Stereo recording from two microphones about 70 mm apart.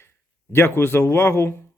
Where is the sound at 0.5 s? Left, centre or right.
Left.